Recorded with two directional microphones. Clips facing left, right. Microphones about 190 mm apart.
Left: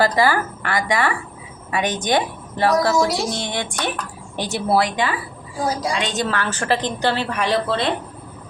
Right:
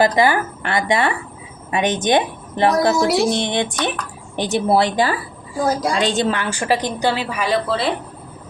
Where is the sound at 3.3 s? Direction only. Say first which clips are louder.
Right 6 dB; 20° right (ahead or behind).